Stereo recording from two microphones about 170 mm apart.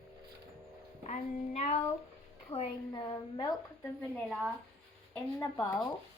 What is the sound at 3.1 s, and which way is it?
Speech, 20° left (ahead or behind).